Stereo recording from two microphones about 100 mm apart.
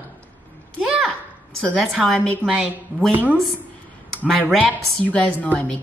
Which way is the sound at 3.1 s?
15° right (ahead or behind).